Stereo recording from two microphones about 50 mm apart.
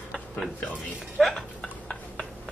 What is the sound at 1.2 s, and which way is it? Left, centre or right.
Dishes, centre.